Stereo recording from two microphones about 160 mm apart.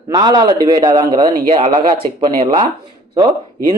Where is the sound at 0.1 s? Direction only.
25° right (ahead or behind).